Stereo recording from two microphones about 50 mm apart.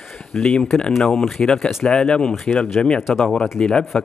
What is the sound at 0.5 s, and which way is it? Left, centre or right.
Speech, centre.